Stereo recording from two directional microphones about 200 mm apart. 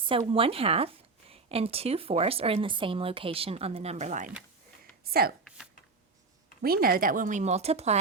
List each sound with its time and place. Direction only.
0.0 s speech: 25° right (ahead or behind)
5.2 s speech: 50° right (ahead or behind)
6.6 s speech: 50° right (ahead or behind); by 7.9 s 30° right (ahead or behind)